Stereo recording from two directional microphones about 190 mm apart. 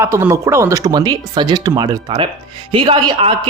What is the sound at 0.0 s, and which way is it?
Speech, 15° right (ahead or behind).